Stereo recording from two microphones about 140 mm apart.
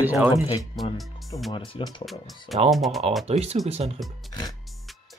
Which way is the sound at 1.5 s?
35° left (ahead or behind).